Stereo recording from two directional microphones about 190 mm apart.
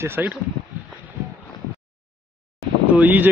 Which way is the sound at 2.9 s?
10° right (ahead or behind).